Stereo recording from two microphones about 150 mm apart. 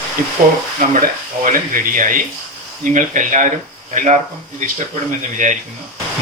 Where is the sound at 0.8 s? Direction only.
65° right (ahead or behind).